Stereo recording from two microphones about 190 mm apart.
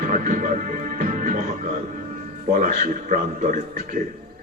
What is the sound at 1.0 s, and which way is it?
Music, 45° right (ahead or behind).